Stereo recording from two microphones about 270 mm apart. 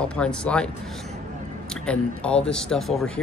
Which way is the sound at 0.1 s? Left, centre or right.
Centre.